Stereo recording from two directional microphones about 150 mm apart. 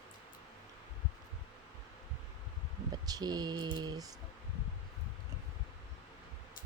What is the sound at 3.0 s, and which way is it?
Speech, 25° right (ahead or behind).